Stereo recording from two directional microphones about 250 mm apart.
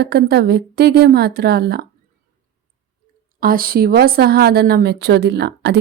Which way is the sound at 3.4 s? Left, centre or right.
Right.